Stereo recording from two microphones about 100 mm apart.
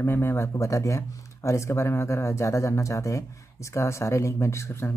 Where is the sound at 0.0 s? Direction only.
25° left (ahead or behind).